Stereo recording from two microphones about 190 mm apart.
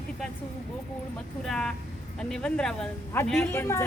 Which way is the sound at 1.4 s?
5° left (ahead or behind).